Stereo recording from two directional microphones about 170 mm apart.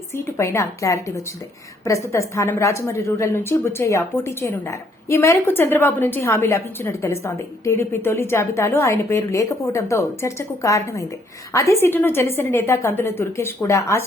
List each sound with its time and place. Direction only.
0.3 s a woman's voice: 15° left (ahead or behind)